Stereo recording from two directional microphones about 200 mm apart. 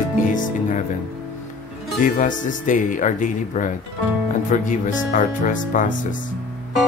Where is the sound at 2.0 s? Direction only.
40° left (ahead or behind).